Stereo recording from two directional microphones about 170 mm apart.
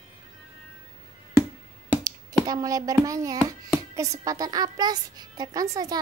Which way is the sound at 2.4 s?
20° right (ahead or behind).